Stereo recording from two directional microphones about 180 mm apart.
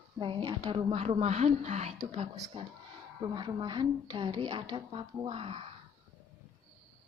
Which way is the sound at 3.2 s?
25° right (ahead or behind).